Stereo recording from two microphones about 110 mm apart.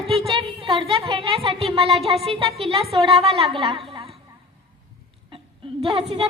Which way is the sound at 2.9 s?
60° right (ahead or behind).